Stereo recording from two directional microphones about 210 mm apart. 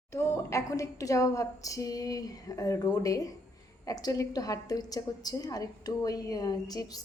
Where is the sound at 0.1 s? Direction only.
15° left (ahead or behind).